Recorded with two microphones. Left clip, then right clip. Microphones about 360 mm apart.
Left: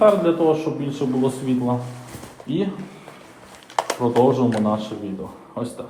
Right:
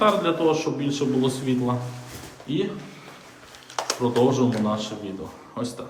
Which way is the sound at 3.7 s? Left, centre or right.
Left.